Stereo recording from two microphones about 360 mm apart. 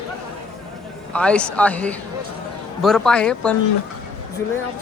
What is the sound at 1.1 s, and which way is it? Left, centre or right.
Speech, centre.